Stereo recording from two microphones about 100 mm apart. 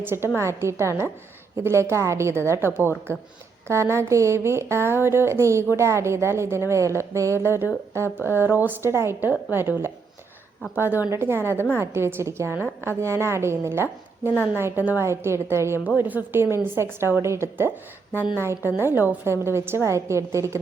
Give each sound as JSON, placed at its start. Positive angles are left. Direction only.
{"t": 0.0, "sound": "speech", "side_deg": -25}